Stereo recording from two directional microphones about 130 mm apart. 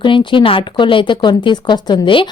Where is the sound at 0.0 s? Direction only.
40° left (ahead or behind).